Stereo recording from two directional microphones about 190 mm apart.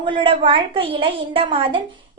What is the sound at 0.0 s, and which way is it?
A woman's voice, 25° right (ahead or behind).